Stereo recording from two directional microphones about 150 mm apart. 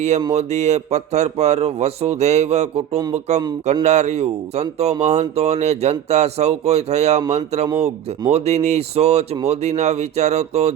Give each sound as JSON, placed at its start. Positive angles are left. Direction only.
{"t": 0.3, "sound": "speech", "side_deg": -50}